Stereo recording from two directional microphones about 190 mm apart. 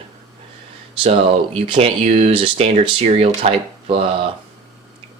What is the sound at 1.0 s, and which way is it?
Speech, 30° right (ahead or behind).